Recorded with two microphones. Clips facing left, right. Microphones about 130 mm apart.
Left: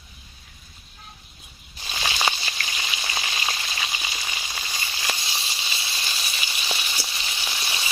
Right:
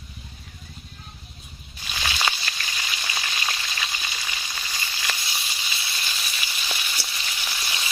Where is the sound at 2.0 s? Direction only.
20° left (ahead or behind).